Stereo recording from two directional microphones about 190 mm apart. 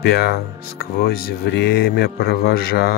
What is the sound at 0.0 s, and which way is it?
Speech, 60° left (ahead or behind).